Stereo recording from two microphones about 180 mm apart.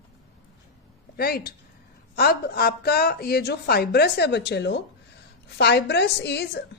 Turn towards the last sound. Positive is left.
turn(degrees=70)  # may be behind; listen again after turning